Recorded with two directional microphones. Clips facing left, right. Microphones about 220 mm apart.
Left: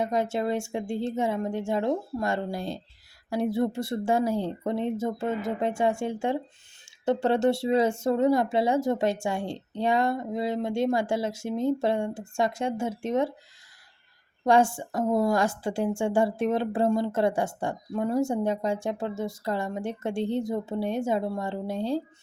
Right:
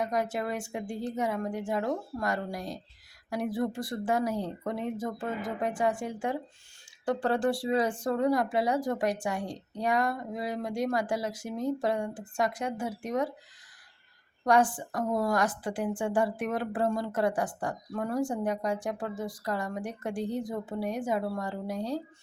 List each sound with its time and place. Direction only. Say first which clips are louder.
0.0 s a woman's voice: left 4 dB; 25° left (ahead or behind)
14.4 s a woman's voice: left 3 dB; 25° left (ahead or behind)